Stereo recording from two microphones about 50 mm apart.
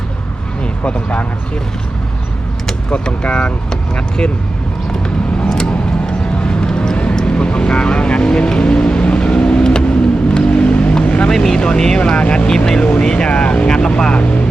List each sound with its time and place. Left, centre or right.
2.9 s speech: left
5.0 s vehicle: centre
11.3 s speech: centre